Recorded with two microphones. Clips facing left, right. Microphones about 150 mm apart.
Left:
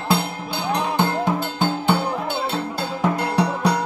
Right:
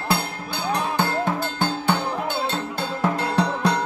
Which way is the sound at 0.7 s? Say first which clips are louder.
Left 2 dB; 15° left (ahead or behind).